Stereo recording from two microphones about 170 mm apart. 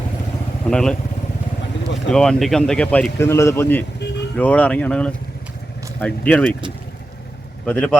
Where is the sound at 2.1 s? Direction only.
5° left (ahead or behind).